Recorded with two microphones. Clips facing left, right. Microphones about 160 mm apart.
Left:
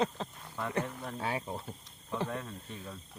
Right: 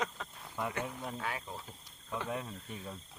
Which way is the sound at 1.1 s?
30° left (ahead or behind).